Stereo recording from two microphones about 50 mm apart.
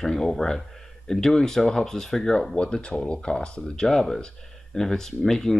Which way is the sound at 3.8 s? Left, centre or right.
Centre.